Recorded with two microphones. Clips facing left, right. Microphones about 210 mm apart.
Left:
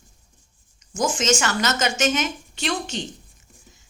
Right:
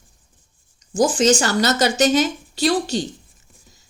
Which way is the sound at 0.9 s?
35° right (ahead or behind).